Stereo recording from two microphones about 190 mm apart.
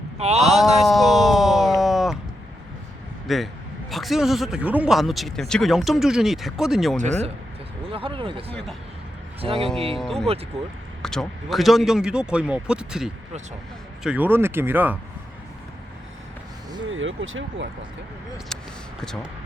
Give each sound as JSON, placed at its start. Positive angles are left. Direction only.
{"t": 0.2, "sound": "speech", "side_deg": -35}
{"t": 0.4, "sound": "a man's voice", "side_deg": 0}
{"t": 0.8, "sound": "a sound", "side_deg": 0}
{"t": 3.2, "sound": "a man's voice", "side_deg": 0}
{"t": 7.0, "sound": "speech", "side_deg": -35}
{"t": 9.9, "sound": "a man's voice", "side_deg": 0}
{"t": 16.9, "sound": "speech", "side_deg": -90}
{"t": 19.0, "sound": "a man's voice", "side_deg": 5}